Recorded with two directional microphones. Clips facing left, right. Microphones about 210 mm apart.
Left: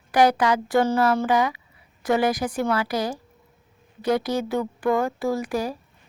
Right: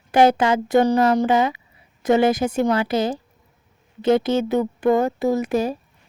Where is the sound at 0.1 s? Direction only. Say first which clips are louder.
Right 3 dB; 25° right (ahead or behind).